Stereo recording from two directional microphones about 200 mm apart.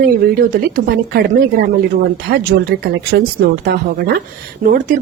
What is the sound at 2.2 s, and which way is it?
Speech, 50° right (ahead or behind).